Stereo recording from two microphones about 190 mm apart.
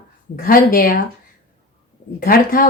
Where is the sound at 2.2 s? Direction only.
50° left (ahead or behind).